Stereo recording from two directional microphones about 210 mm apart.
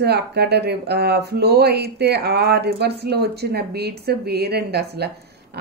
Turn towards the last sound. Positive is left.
turn(degrees=-50)  # may be behind; listen again after turning